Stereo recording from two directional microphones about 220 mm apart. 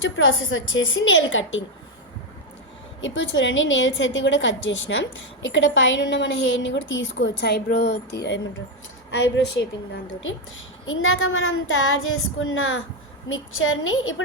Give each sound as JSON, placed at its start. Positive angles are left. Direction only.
{"t": 0.0, "sound": "a woman's voice", "side_deg": 60}
{"t": 3.0, "sound": "a woman's voice", "side_deg": 60}
{"t": 10.8, "sound": "a woman's voice", "side_deg": 65}